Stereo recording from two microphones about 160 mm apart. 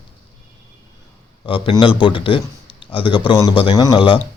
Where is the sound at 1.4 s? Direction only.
35° left (ahead or behind).